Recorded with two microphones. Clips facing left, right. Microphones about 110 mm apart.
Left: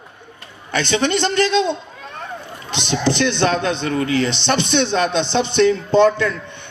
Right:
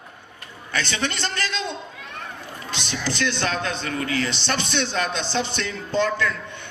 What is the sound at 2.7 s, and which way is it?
Speech, 20° left (ahead or behind).